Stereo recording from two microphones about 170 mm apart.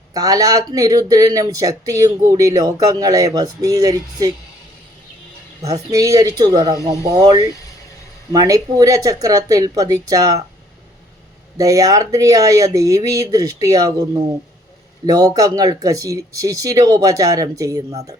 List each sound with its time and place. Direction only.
0.1 s speech: 20° right (ahead or behind)
5.6 s speech: 20° right (ahead or behind)
8.3 s speech: 20° right (ahead or behind)
11.5 s speech: 20° right (ahead or behind)